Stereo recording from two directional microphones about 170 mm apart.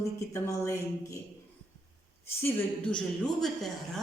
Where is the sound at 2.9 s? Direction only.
Centre (ahead or behind).